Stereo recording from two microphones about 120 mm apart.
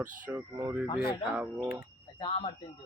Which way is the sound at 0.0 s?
15° right (ahead or behind).